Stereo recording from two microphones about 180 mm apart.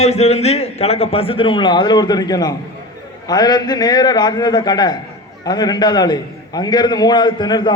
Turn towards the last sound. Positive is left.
turn(degrees=25)  # may be behind; listen again after turning